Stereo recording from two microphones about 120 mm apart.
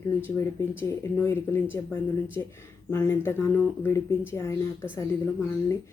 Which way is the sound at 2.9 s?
20° left (ahead or behind).